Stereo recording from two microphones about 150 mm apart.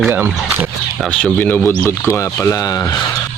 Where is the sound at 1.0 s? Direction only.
10° left (ahead or behind).